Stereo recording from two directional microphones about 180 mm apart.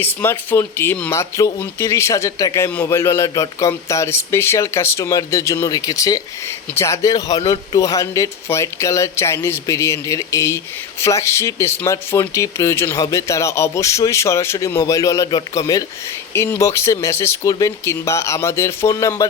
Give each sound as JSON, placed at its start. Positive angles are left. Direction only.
{"t": 0.0, "sound": "speech", "side_deg": 15}